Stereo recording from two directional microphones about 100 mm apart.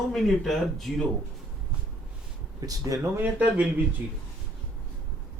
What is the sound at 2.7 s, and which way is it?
Speech, 35° right (ahead or behind).